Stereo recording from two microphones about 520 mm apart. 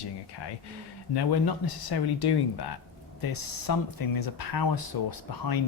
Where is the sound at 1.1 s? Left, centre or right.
Left.